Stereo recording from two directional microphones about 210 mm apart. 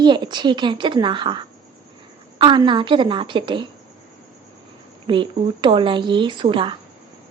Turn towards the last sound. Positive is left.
turn(degrees=-25)  # may be behind; listen again after turning